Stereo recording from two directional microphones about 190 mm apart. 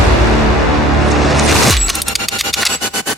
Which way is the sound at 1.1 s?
Centre (ahead or behind).